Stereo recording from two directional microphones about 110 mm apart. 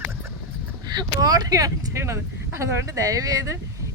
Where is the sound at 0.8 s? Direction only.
35° right (ahead or behind).